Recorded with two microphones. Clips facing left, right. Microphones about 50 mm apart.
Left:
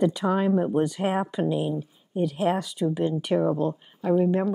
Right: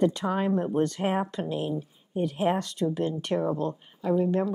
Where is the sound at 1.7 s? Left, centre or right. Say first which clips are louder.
Left 2 dB; centre.